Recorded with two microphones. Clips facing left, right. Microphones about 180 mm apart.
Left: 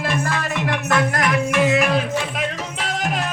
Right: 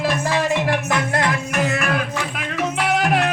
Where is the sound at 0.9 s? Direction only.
20° right (ahead or behind).